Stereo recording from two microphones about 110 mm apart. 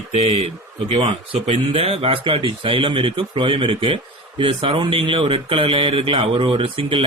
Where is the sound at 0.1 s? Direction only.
70° right (ahead or behind); by 1.6 s 85° right.